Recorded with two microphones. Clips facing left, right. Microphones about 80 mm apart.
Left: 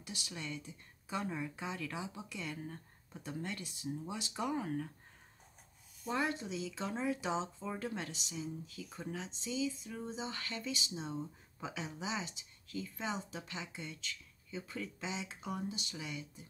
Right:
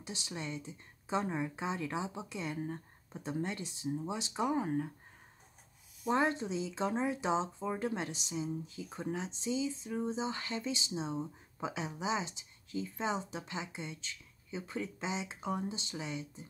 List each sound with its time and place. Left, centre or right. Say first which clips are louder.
0.0 s speech: right 4 dB; right
6.1 s speech: right 4 dB; right